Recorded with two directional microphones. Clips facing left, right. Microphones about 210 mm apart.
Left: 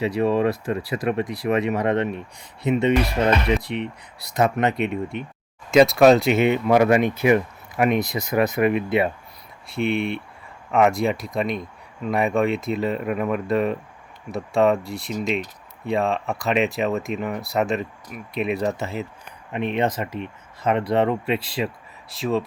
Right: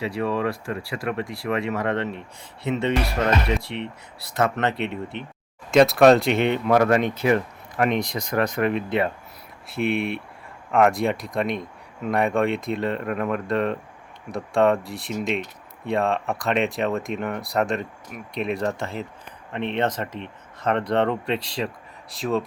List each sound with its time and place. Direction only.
0.0 s speech: 20° left (ahead or behind)
5.7 s speech: centre (ahead or behind)
9.6 s speech: centre (ahead or behind)